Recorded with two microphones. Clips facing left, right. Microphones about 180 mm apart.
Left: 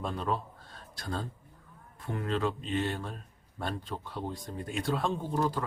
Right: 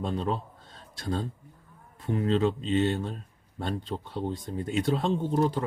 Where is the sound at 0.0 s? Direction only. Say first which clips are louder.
Right 3 dB; 25° right (ahead or behind).